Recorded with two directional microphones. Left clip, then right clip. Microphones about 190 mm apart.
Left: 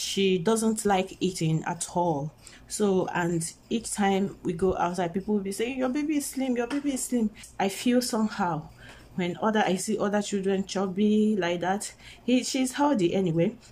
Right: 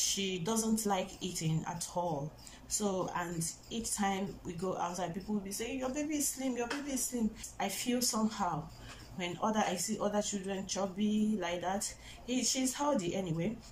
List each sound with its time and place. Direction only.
0.0 s speech: 50° left (ahead or behind)